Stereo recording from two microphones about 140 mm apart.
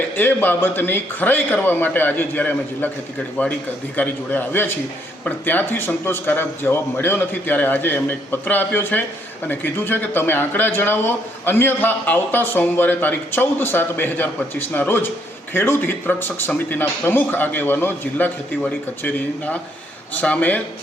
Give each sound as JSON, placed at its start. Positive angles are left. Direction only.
{"t": 0.2, "sound": "speech", "side_deg": 15}